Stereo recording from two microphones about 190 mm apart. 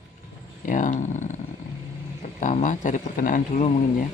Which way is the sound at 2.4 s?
40° left (ahead or behind).